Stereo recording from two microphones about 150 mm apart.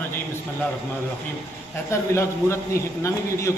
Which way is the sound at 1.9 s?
20° left (ahead or behind).